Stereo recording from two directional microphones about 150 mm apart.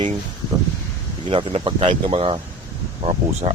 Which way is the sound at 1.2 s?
35° right (ahead or behind).